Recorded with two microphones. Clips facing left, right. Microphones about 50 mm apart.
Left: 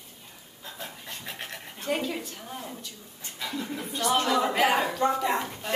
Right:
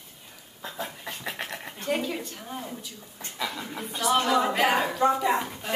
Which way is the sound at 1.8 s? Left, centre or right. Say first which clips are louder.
Right 1 dB; centre.